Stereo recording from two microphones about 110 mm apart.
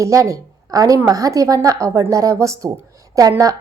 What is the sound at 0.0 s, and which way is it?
A woman's voice, 30° right (ahead or behind).